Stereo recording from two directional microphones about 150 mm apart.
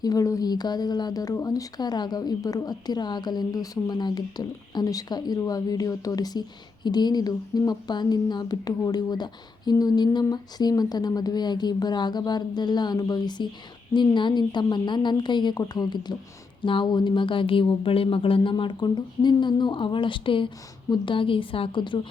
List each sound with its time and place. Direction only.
0.0 s speech: 25° left (ahead or behind)